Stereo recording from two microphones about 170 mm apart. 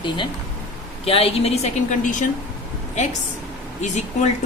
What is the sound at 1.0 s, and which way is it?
A woman's voice, 35° left (ahead or behind).